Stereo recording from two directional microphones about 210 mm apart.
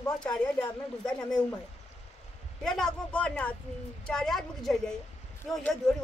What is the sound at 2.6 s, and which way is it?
Speech, 5° left (ahead or behind).